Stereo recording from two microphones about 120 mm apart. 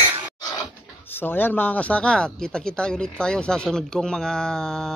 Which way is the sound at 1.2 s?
15° left (ahead or behind).